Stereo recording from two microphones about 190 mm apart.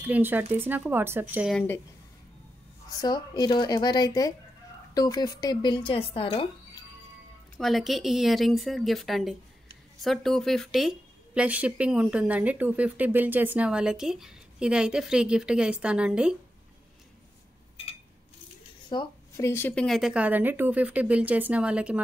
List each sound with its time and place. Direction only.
0.0 s speech: 10° right (ahead or behind)
3.0 s speech: 20° left (ahead or behind)
7.5 s speech: centre (ahead or behind)
18.9 s speech: 20° left (ahead or behind); by 22.0 s 5° right (ahead or behind)